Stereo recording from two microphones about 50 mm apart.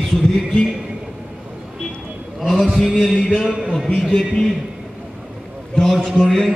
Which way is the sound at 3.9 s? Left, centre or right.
Centre.